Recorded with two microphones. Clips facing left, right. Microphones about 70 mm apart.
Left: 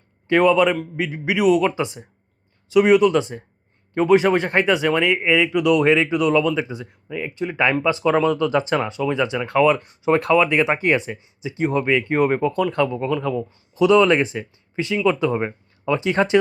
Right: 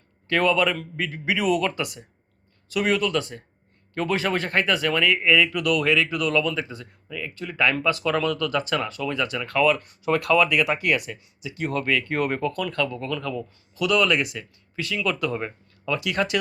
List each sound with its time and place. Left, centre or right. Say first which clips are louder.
0.3 s a man's voice: left 6 dB; centre